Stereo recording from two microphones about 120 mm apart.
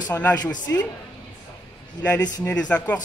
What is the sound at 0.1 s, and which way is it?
Speech, 15° left (ahead or behind).